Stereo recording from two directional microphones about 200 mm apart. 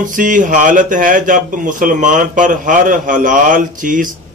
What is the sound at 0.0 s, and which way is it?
A man's voice, 40° right (ahead or behind).